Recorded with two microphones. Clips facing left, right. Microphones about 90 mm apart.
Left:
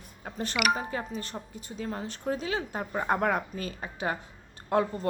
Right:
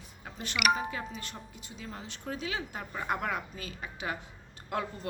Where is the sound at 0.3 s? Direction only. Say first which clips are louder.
Left 2 dB; 40° left (ahead or behind).